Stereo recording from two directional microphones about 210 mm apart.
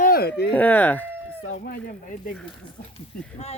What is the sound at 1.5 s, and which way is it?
Speech, 45° left (ahead or behind).